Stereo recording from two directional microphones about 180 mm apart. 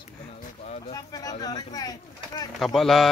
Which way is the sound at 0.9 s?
20° left (ahead or behind).